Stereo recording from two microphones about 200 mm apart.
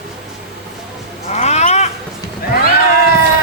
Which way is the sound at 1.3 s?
35° left (ahead or behind).